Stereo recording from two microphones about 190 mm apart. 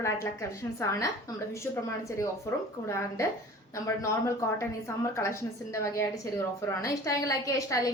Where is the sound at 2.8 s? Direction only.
15° left (ahead or behind).